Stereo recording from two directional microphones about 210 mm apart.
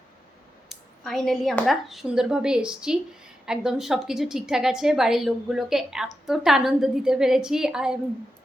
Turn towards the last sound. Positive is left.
turn(degrees=-5)  # may be behind; listen again after turning